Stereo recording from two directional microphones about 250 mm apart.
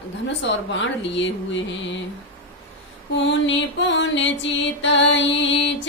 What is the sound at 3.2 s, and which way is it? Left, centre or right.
Music, left.